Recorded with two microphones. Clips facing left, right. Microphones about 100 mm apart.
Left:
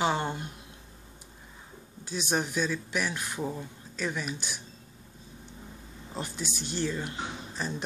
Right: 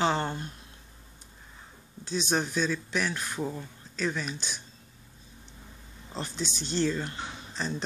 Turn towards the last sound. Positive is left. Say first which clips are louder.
# even
turn(degrees=10)  # may be behind; listen again after turning